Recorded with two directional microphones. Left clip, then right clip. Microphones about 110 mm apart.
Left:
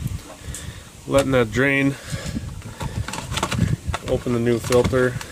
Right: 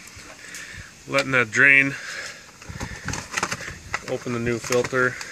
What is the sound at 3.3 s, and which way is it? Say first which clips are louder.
Bee: left 2 dB; 30° right (ahead or behind).